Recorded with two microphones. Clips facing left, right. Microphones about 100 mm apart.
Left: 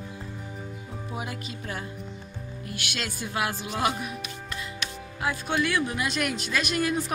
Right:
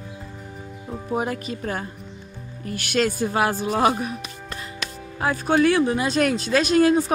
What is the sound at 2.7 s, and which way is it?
Speech, 45° right (ahead or behind).